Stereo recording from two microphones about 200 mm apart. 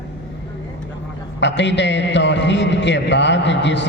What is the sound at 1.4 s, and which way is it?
A man's voice, 60° left (ahead or behind).